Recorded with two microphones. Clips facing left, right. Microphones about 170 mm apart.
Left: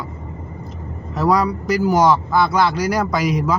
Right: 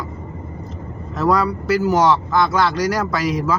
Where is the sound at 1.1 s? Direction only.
10° left (ahead or behind).